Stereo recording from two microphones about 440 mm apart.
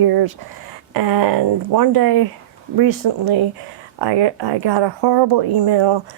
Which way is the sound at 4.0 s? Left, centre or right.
Right.